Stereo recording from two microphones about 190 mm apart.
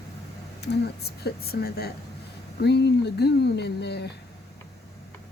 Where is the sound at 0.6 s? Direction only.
60° left (ahead or behind).